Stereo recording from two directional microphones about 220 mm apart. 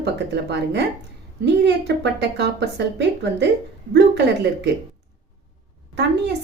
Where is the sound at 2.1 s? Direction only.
50° right (ahead or behind).